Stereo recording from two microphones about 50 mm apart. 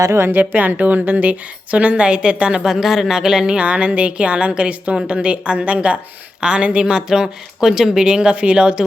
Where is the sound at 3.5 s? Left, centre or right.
Right.